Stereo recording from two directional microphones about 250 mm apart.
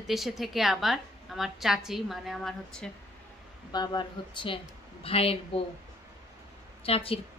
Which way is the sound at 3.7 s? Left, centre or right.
Centre.